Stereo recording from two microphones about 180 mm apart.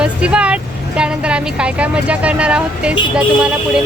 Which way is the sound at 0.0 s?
5° right (ahead or behind).